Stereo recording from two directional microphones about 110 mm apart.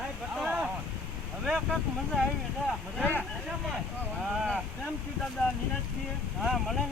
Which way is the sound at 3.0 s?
15° right (ahead or behind).